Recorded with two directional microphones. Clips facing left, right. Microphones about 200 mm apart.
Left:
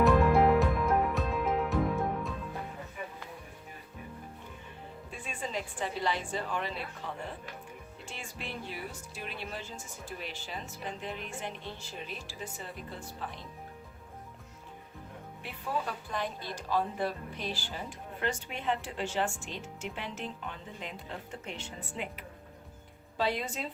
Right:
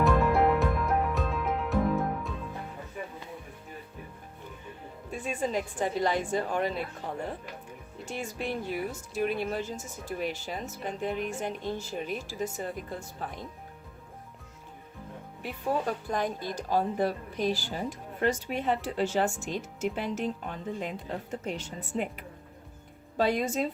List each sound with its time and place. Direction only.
0.0 s music: centre (ahead or behind)
5.1 s a woman's voice: 40° right (ahead or behind)
15.4 s speech: 45° right (ahead or behind)
23.1 s a woman's voice: 45° right (ahead or behind)